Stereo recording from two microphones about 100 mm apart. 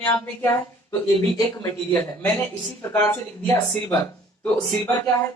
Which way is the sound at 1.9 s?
20° left (ahead or behind).